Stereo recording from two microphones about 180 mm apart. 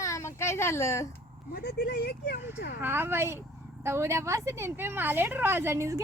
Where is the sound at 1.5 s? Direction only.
60° left (ahead or behind).